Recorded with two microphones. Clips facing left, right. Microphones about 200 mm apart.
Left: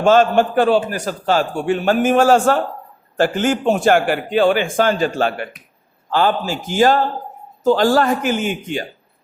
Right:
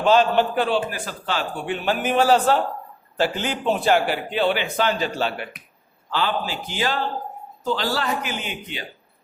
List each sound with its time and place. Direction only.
0.0 s a man's voice: 50° left (ahead or behind)